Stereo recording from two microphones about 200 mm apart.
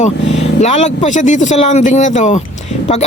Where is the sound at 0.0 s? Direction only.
35° left (ahead or behind).